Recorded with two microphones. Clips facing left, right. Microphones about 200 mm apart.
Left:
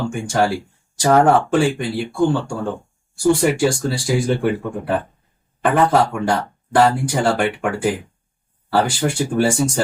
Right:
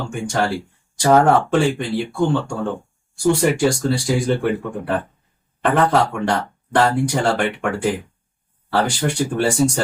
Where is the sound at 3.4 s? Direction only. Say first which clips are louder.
Even; 5° left (ahead or behind).